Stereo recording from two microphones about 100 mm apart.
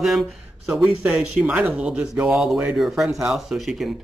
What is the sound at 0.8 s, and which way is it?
Speech, 20° right (ahead or behind).